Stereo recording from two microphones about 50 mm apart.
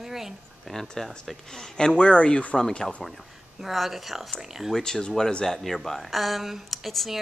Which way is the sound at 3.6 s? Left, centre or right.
Centre.